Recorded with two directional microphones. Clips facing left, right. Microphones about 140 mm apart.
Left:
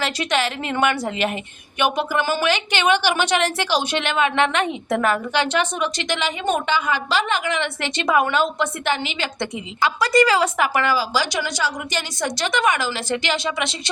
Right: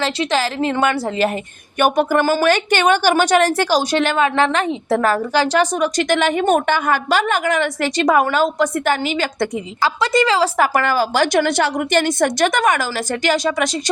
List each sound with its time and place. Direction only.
0.0 s a woman's voice: 30° right (ahead or behind)
1.8 s a woman's voice: 45° right (ahead or behind)
10.0 s a woman's voice: 25° right (ahead or behind)
10.6 s a woman's voice: 45° right (ahead or behind)